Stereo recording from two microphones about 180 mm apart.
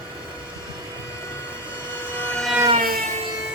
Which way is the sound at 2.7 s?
50° right (ahead or behind).